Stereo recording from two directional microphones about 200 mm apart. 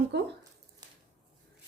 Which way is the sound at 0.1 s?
60° right (ahead or behind).